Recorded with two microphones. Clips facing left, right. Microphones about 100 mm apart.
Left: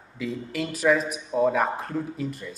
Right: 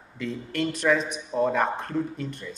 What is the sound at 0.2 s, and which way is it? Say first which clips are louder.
A man's voice: right 1 dB; centre (ahead or behind).